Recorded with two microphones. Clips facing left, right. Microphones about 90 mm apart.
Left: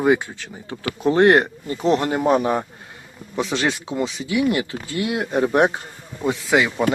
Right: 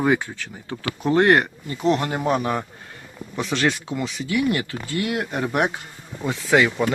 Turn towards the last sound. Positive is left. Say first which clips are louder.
# even
turn(degrees=20)  # may be behind; listen again after turning